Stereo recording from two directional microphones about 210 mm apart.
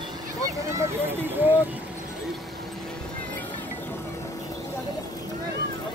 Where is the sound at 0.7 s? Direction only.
10° right (ahead or behind).